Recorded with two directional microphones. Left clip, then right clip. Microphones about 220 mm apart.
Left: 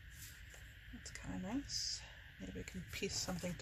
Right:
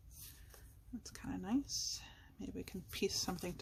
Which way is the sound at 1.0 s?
35° right (ahead or behind).